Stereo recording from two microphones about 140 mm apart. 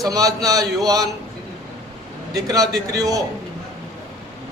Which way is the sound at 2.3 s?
25° right (ahead or behind).